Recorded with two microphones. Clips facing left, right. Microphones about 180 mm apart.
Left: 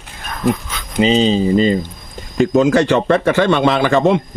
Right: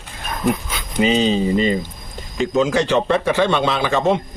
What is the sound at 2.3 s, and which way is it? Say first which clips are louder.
A man's voice: left 5 dB; 50° left (ahead or behind).